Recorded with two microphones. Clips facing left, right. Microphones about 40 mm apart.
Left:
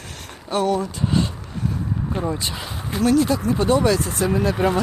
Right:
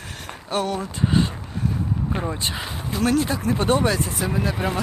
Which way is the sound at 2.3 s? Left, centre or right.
Right.